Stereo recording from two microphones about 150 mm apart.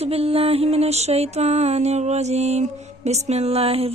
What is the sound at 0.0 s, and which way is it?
Music, 40° right (ahead or behind).